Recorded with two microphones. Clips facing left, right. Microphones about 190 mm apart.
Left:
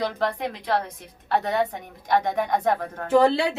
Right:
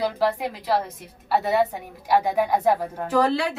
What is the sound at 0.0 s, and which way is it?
A woman's voice, 5° right (ahead or behind).